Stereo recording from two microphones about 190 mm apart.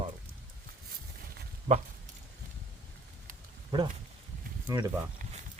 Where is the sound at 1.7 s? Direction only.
40° right (ahead or behind).